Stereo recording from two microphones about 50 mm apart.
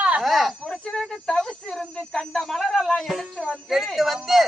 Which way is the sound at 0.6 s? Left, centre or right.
Centre.